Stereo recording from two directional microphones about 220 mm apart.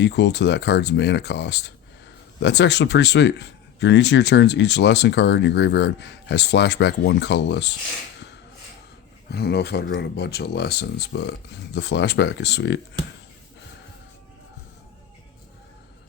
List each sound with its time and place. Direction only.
0.0 s speech: 50° left (ahead or behind)
9.3 s speech: 50° left (ahead or behind)